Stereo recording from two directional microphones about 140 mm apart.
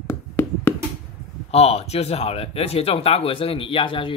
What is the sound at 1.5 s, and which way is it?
Speech, 50° left (ahead or behind).